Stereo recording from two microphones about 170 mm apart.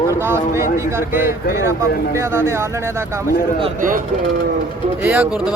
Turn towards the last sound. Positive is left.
turn(degrees=-10)  # may be behind; listen again after turning